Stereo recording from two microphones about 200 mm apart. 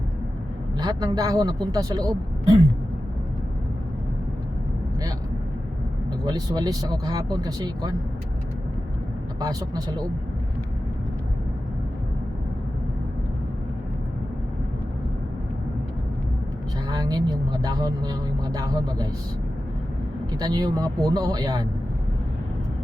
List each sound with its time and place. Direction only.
0.8 s speech: 20° right (ahead or behind)
6.2 s speech: 20° right (ahead or behind)
9.4 s speech: 20° right (ahead or behind)
16.9 s speech: 20° right (ahead or behind)
20.4 s speech: 20° right (ahead or behind)